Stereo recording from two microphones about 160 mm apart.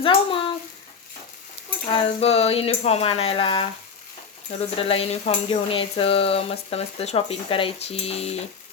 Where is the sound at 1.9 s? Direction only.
40° left (ahead or behind).